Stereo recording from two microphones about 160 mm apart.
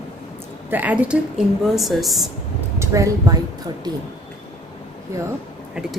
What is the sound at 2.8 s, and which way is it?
Speech, 20° right (ahead or behind).